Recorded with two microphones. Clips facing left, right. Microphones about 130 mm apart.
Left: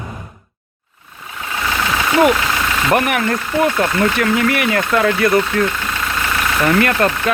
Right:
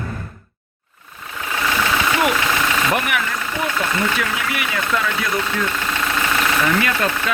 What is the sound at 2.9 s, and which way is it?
Speech, 50° left (ahead or behind).